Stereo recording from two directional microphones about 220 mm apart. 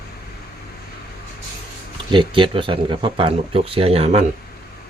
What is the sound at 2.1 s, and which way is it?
Speech, 20° right (ahead or behind).